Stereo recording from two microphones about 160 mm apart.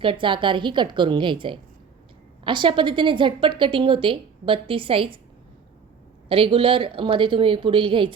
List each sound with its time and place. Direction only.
0.0 s a woman's voice: 30° right (ahead or behind)
6.2 s a woman's voice: 35° right (ahead or behind)